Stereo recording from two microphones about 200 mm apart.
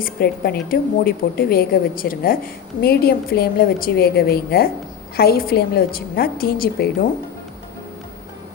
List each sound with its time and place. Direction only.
0.0 s a woman's voice: 50° left (ahead or behind)